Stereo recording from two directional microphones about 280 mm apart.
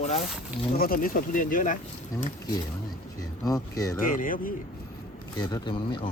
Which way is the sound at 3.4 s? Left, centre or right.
Centre.